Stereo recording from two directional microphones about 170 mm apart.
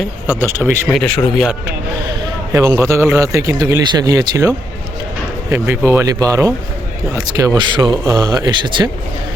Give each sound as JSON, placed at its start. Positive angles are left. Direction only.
{"t": 0.3, "sound": "speech", "side_deg": -15}
{"t": 0.9, "sound": "speech", "side_deg": 5}
{"t": 2.5, "sound": "speech", "side_deg": -15}